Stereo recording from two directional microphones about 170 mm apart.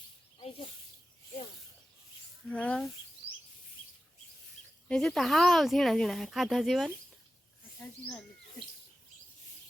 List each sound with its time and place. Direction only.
0.3 s snake: 35° left (ahead or behind)
2.5 s speech: 5° left (ahead or behind)
4.9 s speech: 5° left (ahead or behind)